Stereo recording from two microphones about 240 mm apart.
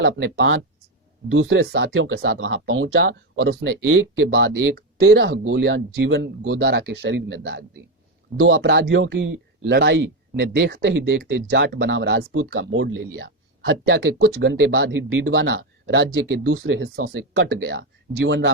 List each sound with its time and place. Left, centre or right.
0.0 s speech: right
4.7 s speech: right